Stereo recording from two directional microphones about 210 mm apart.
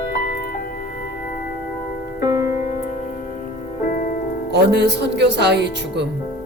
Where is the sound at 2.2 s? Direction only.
15° right (ahead or behind).